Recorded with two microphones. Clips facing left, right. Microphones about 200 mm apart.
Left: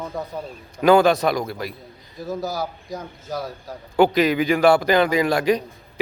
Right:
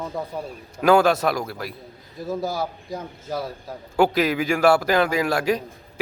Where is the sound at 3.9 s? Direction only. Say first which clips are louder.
Left 3 dB; centre (ahead or behind).